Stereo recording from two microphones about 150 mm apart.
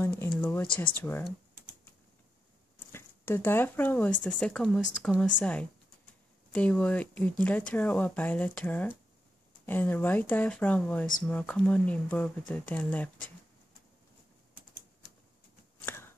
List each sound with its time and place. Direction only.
0.0 s speech: 15° left (ahead or behind)
2.9 s speech: 15° left (ahead or behind)
15.8 s a sound: 15° left (ahead or behind)